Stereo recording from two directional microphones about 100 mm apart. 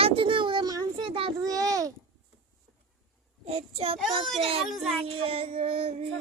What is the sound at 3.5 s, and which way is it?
Child singing, 80° right.